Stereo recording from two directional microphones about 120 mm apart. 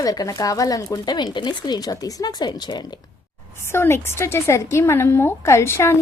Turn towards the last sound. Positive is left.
turn(degrees=20)  # may be behind; listen again after turning